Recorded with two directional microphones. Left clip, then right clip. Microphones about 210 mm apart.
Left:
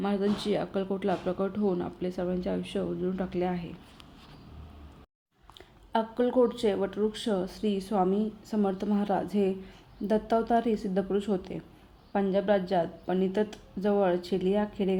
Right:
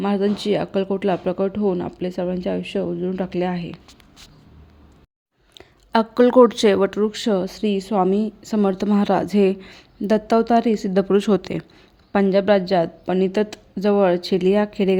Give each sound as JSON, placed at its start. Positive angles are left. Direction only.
{"t": 0.0, "sound": "speech", "side_deg": -35}
{"t": 5.9, "sound": "speech", "side_deg": -45}